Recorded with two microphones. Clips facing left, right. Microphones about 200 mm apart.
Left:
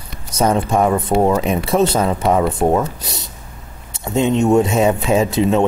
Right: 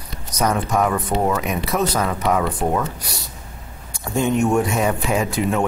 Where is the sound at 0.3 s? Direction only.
25° left (ahead or behind).